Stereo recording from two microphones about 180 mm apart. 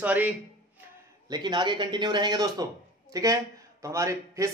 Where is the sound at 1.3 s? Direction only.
25° right (ahead or behind).